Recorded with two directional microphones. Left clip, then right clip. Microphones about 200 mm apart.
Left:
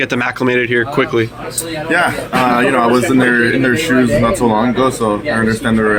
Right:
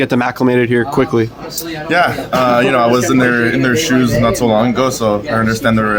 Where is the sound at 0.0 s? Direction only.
30° right (ahead or behind).